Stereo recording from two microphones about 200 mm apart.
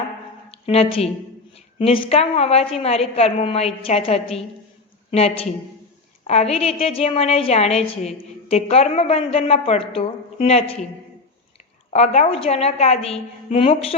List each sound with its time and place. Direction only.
0.5 s a woman's voice: 30° left (ahead or behind)
11.9 s a woman's voice: 35° left (ahead or behind)